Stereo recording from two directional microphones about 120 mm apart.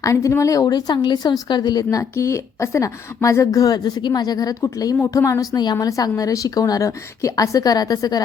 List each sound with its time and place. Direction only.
0.0 s a woman's voice: 25° left (ahead or behind)